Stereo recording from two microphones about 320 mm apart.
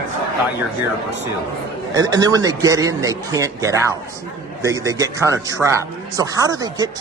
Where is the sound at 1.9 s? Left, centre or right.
Centre.